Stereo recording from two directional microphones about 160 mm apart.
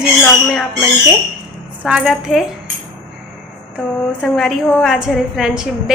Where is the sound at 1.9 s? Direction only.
5° right (ahead or behind).